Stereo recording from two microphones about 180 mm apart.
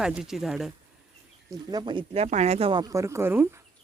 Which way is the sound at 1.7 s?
25° right (ahead or behind).